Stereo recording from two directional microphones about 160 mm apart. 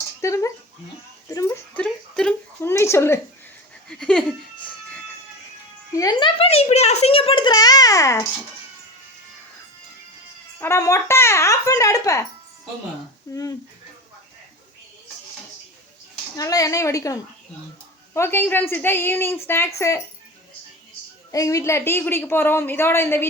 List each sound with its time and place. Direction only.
0.2 s a child's voice: 20° left (ahead or behind)
1.7 s a sound: 5° left (ahead or behind)
3.8 s laughter: 5° left (ahead or behind)
5.9 s a child's voice: 25° left (ahead or behind)
10.6 s a child's voice: 15° left (ahead or behind)
13.3 s a child's voice: 25° left (ahead or behind)
16.4 s a child's voice: 20° left (ahead or behind)
21.3 s speech: 20° left (ahead or behind)